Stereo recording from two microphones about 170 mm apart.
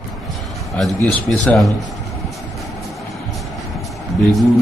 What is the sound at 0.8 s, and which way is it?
Speech, 5° left (ahead or behind).